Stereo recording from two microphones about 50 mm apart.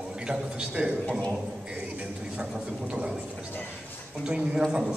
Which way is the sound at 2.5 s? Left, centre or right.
Centre.